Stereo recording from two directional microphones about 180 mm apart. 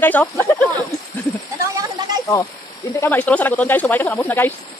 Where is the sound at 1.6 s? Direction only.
20° right (ahead or behind).